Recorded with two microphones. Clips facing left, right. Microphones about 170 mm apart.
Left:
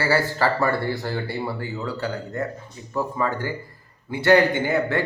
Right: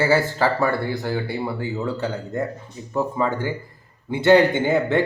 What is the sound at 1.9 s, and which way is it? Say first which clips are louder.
Speech: right 2 dB; 20° right (ahead or behind).